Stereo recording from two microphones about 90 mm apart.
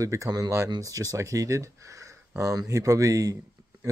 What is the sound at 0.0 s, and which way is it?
Speech, 35° right (ahead or behind).